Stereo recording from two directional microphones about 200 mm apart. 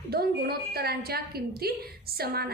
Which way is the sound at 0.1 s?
50° right (ahead or behind).